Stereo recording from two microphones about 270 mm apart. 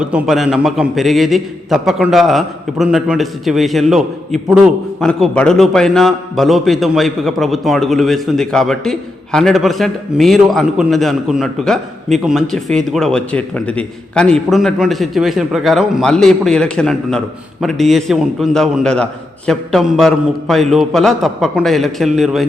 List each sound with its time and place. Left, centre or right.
0.0 s a man's voice: centre